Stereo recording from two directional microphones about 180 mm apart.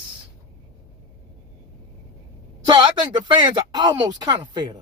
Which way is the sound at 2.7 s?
25° right (ahead or behind).